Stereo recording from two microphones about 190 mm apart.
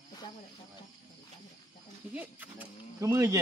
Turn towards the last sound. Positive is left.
turn(degrees=-15)  # may be behind; listen again after turning